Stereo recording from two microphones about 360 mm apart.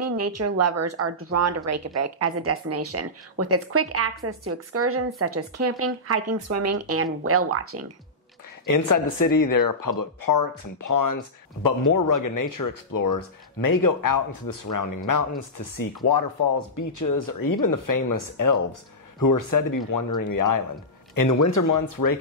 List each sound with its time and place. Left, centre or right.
0.0 s speech: right
8.6 s speech: left
16.7 s speech: left